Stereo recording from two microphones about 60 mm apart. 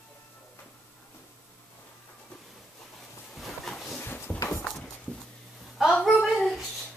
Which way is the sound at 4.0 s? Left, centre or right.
Left.